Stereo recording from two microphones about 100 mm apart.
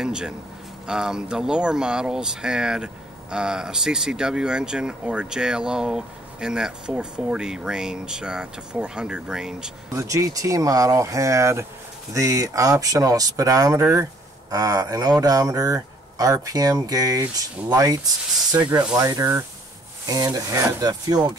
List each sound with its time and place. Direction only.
0.0 s a sound: 5° right (ahead or behind)
0.8 s speech: 5° right (ahead or behind)
9.9 s speech: 30° right (ahead or behind)
20.9 s speech: 45° right (ahead or behind)